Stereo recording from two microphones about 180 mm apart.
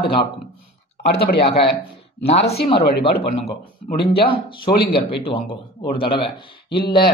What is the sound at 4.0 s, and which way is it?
Speech, 60° left (ahead or behind).